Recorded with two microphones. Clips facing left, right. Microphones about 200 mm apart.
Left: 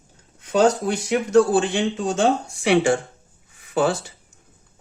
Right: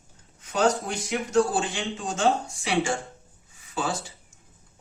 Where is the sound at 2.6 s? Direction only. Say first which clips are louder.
Left 10 dB; 65° left (ahead or behind).